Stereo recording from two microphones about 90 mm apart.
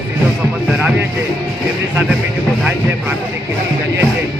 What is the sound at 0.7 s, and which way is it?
Music, 10° right (ahead or behind).